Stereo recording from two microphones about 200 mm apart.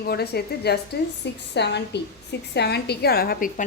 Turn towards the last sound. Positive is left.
turn(degrees=45)  # may be behind; listen again after turning